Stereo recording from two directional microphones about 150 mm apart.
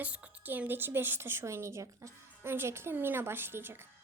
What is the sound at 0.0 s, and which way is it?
A woman's voice, 10° right (ahead or behind).